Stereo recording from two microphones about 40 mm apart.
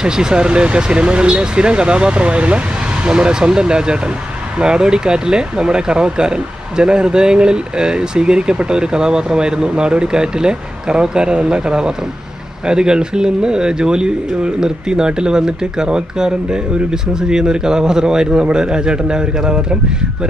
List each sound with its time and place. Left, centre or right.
0.0 s speech: centre